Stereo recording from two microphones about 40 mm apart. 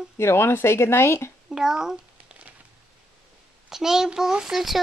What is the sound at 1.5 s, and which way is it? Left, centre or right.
Speech, centre.